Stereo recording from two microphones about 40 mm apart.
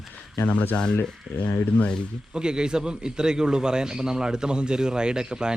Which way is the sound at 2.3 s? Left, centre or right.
Centre.